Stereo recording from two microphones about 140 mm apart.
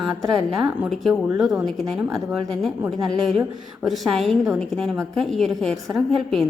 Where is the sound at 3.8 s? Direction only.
Centre (ahead or behind).